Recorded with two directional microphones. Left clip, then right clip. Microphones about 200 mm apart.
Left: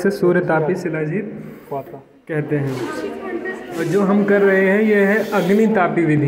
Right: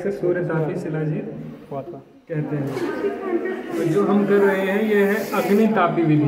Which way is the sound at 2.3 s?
50° left (ahead or behind).